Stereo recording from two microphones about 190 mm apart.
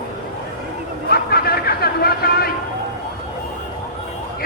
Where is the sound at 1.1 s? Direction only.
55° left (ahead or behind).